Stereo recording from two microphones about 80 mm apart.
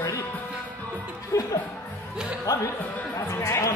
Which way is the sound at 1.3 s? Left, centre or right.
Left.